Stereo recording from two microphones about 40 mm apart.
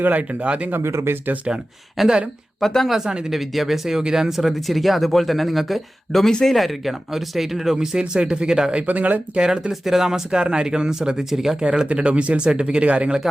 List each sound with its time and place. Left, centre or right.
0.0 s speech: right
0.8 s speech: right
2.0 s speech: centre
2.6 s speech: centre
3.2 s speech: centre
6.2 s speech: centre
7.8 s speech: centre
8.9 s speech: right
9.4 s speech: centre
10.3 s speech: right
11.6 s speech: right